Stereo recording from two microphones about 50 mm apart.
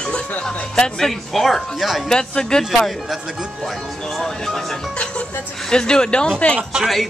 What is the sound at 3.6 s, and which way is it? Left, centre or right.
Speech, centre.